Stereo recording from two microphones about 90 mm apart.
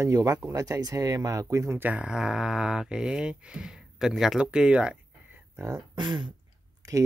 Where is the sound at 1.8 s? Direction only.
15° right (ahead or behind).